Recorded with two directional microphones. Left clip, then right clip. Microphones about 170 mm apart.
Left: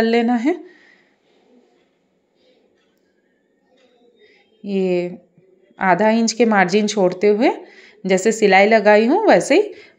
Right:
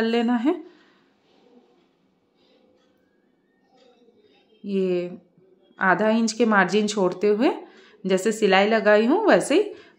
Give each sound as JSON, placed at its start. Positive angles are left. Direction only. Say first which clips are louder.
{"t": 0.0, "sound": "speech", "louder": "left 6 dB", "side_deg": 20}
{"t": 4.6, "sound": "a woman's voice", "louder": "left 5 dB", "side_deg": 20}